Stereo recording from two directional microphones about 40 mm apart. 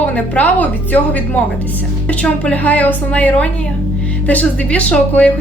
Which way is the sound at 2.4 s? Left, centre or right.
Left.